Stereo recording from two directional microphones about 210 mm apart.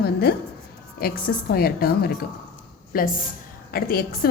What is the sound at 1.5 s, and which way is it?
A woman's voice, 45° left (ahead or behind).